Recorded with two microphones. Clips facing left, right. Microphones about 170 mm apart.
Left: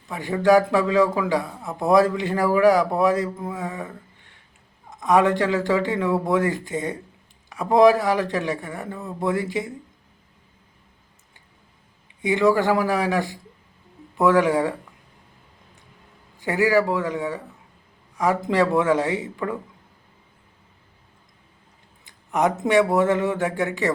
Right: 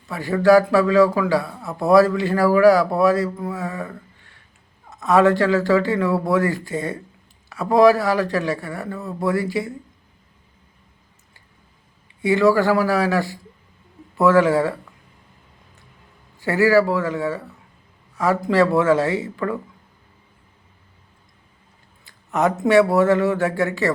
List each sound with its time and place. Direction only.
0.1 s a man's voice: 15° left (ahead or behind)
12.2 s a man's voice: 20° left (ahead or behind)
16.4 s a man's voice: 15° left (ahead or behind)
22.0 s a man's voice: 15° left (ahead or behind)